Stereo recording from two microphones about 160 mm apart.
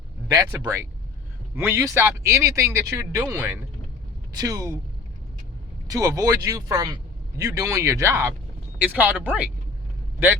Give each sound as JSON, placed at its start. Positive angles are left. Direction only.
{"t": 0.3, "sound": "a man's voice", "side_deg": -20}
{"t": 5.9, "sound": "a man's voice", "side_deg": -20}